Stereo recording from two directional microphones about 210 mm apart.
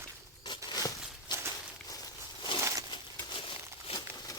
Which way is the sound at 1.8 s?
15° left (ahead or behind).